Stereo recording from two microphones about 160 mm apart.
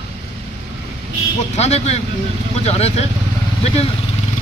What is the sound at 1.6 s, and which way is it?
Speech, 40° left (ahead or behind).